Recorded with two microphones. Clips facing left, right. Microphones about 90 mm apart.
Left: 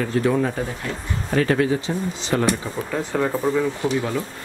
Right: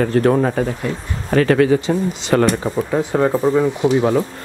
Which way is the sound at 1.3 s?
85° right.